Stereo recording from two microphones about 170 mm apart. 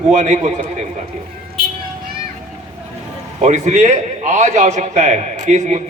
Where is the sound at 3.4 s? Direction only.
45° right (ahead or behind).